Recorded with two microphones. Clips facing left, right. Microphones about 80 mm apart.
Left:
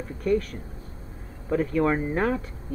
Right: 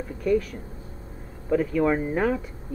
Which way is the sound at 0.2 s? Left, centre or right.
Left.